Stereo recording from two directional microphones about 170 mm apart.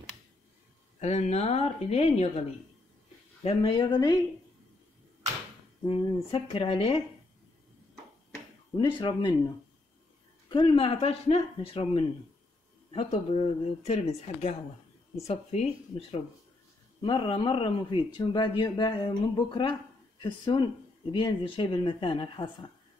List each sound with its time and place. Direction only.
0.9 s speech: 45° left (ahead or behind)
3.4 s speech: 30° left (ahead or behind)
5.9 s speech: 35° left (ahead or behind)
8.7 s speech: 25° left (ahead or behind)
10.5 s speech: 30° left (ahead or behind)